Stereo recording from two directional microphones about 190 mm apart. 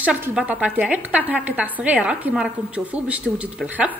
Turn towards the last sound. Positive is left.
turn(degrees=-10)  # may be behind; listen again after turning